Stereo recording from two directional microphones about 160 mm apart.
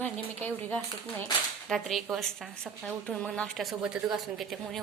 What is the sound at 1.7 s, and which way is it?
A woman's voice, centre (ahead or behind).